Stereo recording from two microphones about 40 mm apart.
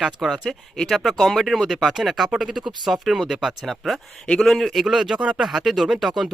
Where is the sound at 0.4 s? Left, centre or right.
Centre.